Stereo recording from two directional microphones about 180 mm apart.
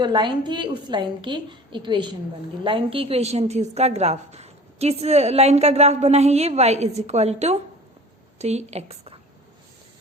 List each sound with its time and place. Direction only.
0.0 s a woman's voice: 25° right (ahead or behind)